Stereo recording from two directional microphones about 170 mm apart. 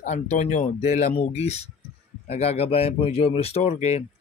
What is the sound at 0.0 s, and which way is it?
Speech, 45° left (ahead or behind).